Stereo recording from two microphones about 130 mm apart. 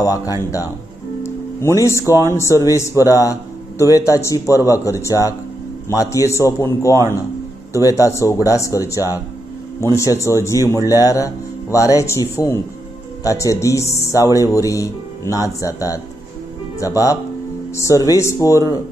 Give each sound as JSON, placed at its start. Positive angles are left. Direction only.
{"t": 0.0, "sound": "speech", "side_deg": 25}
{"t": 1.2, "sound": "music", "side_deg": 20}
{"t": 2.2, "sound": "speech", "side_deg": 20}